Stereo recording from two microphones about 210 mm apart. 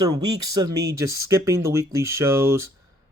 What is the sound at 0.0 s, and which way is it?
Speech, 15° right (ahead or behind).